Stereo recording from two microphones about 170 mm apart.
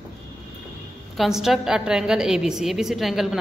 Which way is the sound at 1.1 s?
Centre (ahead or behind).